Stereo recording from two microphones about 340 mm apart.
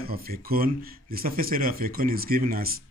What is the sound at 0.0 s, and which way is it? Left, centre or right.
Speech, right.